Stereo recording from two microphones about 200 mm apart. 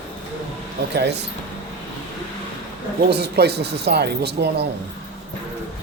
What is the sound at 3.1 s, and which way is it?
Speech, 55° right (ahead or behind).